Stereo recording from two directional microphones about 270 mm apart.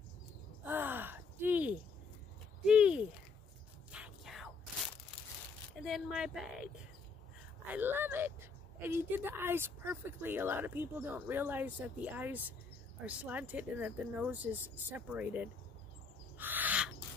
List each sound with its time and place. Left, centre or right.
0.7 s gasp: centre
2.6 s a sound: centre
5.8 s a woman's voice: centre
7.7 s speech: centre
16.3 s owl: centre